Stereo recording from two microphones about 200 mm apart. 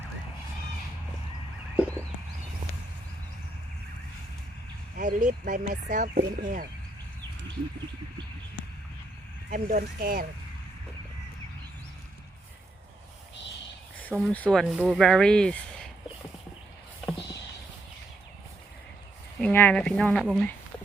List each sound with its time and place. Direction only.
1.7 s a sound: 10° right (ahead or behind)
4.9 s speech: 40° right (ahead or behind)
9.5 s speech: 45° right (ahead or behind)
14.1 s speech: centre (ahead or behind)
19.4 s speech: 10° left (ahead or behind)